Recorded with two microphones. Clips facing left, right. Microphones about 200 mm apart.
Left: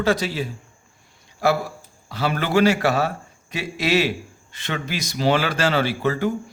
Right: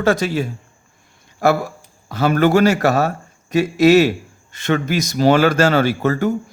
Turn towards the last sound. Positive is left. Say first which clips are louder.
# right 4 dB
turn(degrees=-45)  # may be behind; listen again after turning